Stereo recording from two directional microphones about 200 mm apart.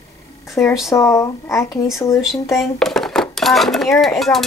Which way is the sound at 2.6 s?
Centre (ahead or behind).